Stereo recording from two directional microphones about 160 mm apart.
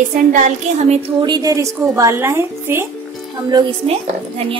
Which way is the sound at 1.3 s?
20° right (ahead or behind).